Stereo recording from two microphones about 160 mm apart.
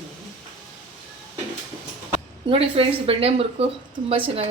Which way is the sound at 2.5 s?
35° right (ahead or behind).